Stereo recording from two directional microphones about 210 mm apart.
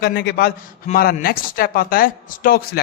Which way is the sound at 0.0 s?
50° left (ahead or behind).